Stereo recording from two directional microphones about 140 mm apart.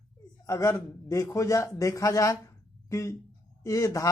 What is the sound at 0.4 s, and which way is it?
Speech, 20° left (ahead or behind).